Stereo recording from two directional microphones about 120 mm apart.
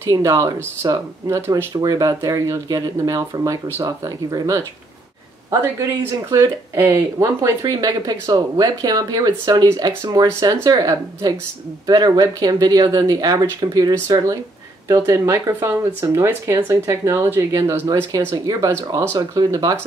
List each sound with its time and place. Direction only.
0.0 s speech: 30° right (ahead or behind)